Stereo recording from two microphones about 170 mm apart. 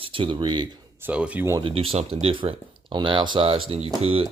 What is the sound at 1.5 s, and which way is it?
Speech, 30° right (ahead or behind).